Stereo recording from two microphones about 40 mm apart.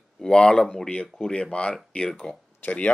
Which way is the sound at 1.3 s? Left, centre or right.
Left.